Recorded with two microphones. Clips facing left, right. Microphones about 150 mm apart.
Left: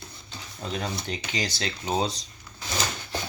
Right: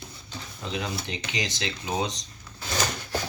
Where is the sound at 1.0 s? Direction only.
35° left (ahead or behind).